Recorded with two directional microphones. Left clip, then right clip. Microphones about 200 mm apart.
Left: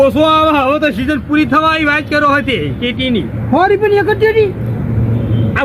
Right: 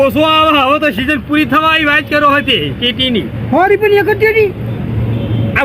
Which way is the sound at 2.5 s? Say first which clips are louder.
Right 3 dB; 50° left (ahead or behind).